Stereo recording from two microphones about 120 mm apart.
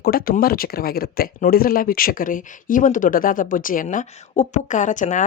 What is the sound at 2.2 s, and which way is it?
A woman's voice, 90° left.